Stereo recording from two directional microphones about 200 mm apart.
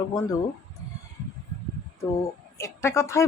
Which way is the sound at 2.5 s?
15° left (ahead or behind).